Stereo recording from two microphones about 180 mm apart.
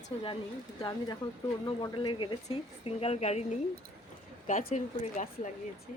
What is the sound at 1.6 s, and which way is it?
Speech, 25° left (ahead or behind).